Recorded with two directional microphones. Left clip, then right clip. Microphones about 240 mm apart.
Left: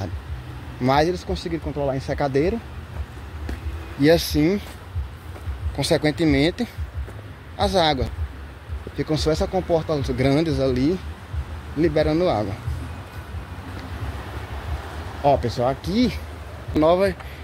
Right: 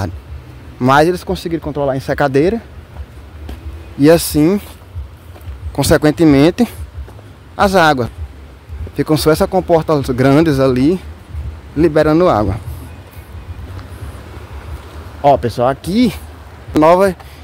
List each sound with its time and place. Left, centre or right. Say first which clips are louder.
0.8 s speech: right 9 dB; right
4.0 s speech: right 8 dB; right
5.8 s speech: right 9 dB; right
15.2 s speech: right 8 dB; right